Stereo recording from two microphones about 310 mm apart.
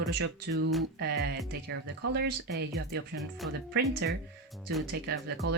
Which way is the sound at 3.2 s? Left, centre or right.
Centre.